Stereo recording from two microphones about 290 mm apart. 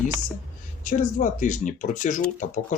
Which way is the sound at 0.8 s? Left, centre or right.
Left.